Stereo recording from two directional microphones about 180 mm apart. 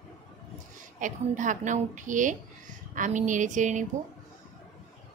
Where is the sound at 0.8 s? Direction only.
45° right (ahead or behind).